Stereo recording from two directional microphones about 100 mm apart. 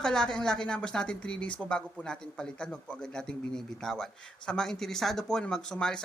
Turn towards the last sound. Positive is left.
turn(degrees=5)  # may be behind; listen again after turning